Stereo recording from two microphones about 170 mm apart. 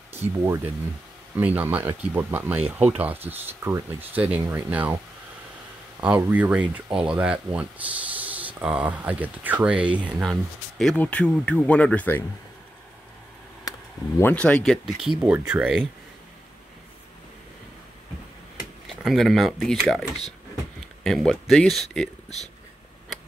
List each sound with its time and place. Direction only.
0.2 s speech: 10° right (ahead or behind)
5.9 s speech: 10° right (ahead or behind); by 12.3 s 10° left (ahead or behind)
13.7 s a sound: 20° left (ahead or behind)
14.3 s speech: 5° left (ahead or behind)
18.9 s speech: centre (ahead or behind)